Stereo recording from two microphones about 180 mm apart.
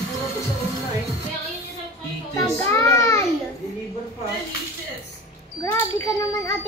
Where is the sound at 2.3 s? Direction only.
15° left (ahead or behind).